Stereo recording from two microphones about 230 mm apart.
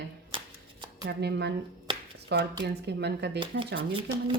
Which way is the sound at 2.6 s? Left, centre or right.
Right.